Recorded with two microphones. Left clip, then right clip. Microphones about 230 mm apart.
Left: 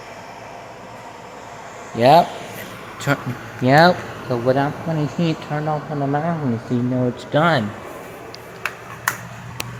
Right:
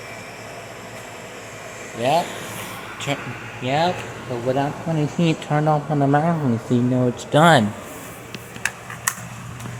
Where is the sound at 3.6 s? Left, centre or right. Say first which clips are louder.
Left 7 dB; left.